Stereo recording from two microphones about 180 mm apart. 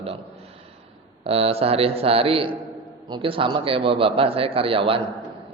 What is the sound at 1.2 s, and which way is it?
A man's voice, 35° right (ahead or behind).